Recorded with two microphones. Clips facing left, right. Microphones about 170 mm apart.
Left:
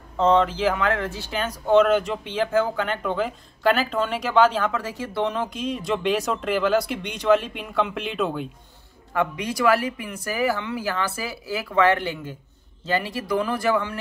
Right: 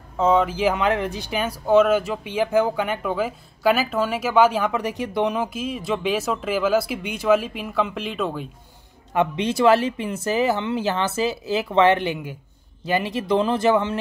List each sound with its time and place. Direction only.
0.2 s speech: 5° right (ahead or behind)
9.1 s speech: 20° right (ahead or behind)